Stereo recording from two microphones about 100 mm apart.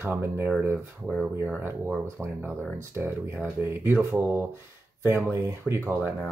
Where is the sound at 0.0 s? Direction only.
25° right (ahead or behind).